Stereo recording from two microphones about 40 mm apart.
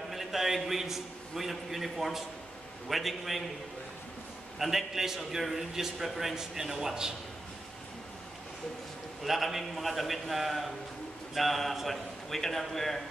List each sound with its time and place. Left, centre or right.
0.1 s a man's voice: centre
4.6 s a man's voice: centre
9.2 s a man's voice: centre